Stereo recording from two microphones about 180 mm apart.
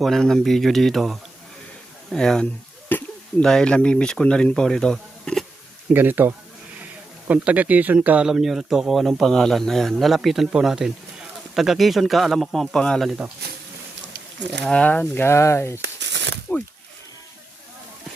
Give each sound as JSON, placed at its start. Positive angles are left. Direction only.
{"t": 0.0, "sound": "speech", "side_deg": 0}
{"t": 2.9, "sound": "a sound", "side_deg": 10}
{"t": 3.4, "sound": "speech", "side_deg": 5}
{"t": 5.9, "sound": "speech", "side_deg": -10}
{"t": 14.6, "sound": "speech", "side_deg": 5}
{"t": 15.8, "sound": "a sound", "side_deg": -75}